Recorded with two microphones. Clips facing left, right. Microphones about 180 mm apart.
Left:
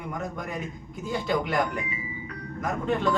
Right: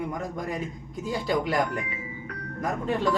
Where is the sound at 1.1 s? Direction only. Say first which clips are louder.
Right 1 dB; 35° right (ahead or behind).